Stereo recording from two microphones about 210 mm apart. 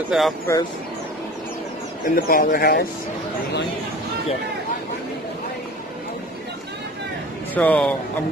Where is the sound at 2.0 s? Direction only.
40° left (ahead or behind).